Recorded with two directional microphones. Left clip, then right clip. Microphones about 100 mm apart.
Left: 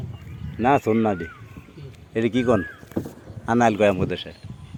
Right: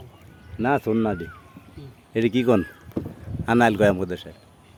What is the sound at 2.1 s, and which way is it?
Speech, 85° right.